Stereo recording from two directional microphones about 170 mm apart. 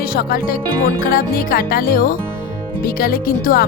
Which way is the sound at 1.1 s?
60° left (ahead or behind).